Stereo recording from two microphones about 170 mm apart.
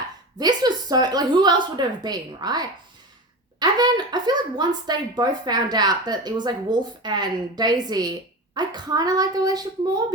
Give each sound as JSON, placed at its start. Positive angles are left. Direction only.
{"t": 0.3, "sound": "a woman's voice", "side_deg": -25}